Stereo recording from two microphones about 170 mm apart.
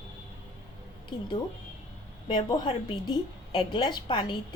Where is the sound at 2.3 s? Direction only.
25° left (ahead or behind).